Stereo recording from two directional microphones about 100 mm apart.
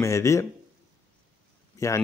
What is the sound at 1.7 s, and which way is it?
Speech, 30° left (ahead or behind).